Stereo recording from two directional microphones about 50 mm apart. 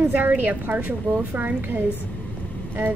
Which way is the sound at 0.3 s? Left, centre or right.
Right.